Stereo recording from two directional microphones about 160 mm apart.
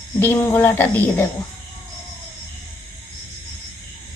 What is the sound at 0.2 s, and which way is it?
Speech, 15° left (ahead or behind).